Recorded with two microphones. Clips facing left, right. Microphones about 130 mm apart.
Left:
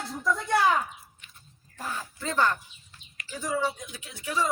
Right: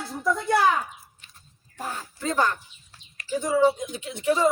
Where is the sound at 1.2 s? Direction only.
35° right (ahead or behind).